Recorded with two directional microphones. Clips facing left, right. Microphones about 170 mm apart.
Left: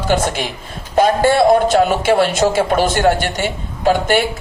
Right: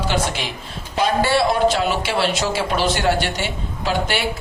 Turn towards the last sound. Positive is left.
turn(degrees=50)  # may be behind; listen again after turning